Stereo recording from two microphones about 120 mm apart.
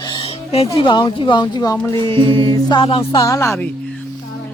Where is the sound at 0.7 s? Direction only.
40° left (ahead or behind).